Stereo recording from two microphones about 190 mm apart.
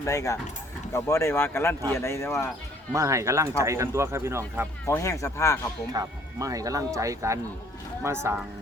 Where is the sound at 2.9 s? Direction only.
15° right (ahead or behind).